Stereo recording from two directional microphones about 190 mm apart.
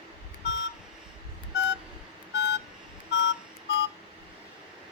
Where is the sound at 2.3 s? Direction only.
65° left (ahead or behind).